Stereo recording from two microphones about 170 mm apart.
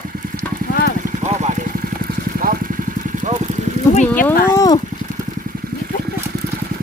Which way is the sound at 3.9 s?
45° left (ahead or behind).